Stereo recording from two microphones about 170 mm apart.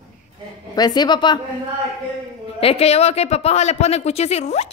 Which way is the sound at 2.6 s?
35° left (ahead or behind).